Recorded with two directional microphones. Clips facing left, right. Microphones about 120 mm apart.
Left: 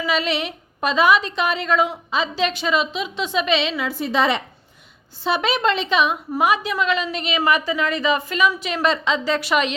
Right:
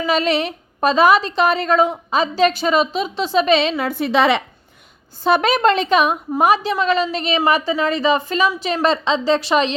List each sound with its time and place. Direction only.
0.0 s a woman's voice: 40° right (ahead or behind); by 4.4 s 70° right (ahead or behind)
5.2 s a woman's voice: 50° right (ahead or behind)
6.4 s a woman's voice: 35° right (ahead or behind)